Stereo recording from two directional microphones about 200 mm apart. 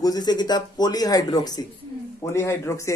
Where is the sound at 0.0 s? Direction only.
20° left (ahead or behind).